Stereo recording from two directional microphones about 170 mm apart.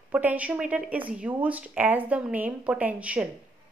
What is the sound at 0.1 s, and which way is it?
Speech, 10° right (ahead or behind).